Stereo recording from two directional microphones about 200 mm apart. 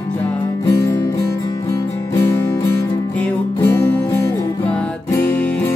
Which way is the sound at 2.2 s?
15° left (ahead or behind).